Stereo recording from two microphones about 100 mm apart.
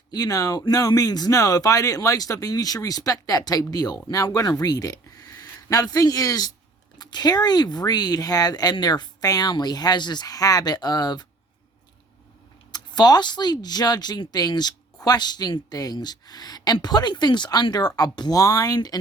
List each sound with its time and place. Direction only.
0.1 s speech: 40° left (ahead or behind)
12.7 s speech: 45° left (ahead or behind)